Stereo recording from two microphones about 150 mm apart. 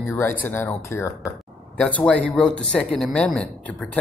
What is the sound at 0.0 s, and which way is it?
Speech, 15° left (ahead or behind).